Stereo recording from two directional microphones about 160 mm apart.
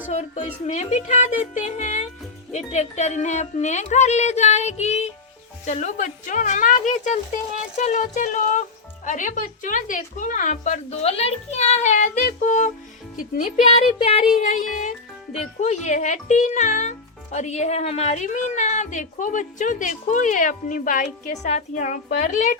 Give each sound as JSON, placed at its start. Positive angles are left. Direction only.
{"t": 0.1, "sound": "a woman's voice", "side_deg": 45}
{"t": 13.7, "sound": "music", "side_deg": 40}
{"t": 14.4, "sound": "a woman's voice", "side_deg": 55}
{"t": 21.4, "sound": "a woman's voice", "side_deg": 45}